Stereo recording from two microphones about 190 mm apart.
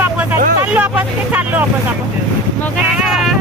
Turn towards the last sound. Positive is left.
turn(degrees=0)  # may be behind; listen again after turning